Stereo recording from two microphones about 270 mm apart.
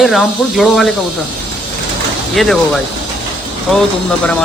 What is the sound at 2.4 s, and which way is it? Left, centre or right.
Speech, centre.